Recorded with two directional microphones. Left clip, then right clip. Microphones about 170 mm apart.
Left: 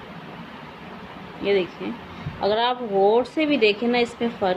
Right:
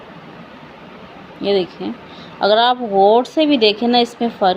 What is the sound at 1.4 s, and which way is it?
Speech, 35° right (ahead or behind).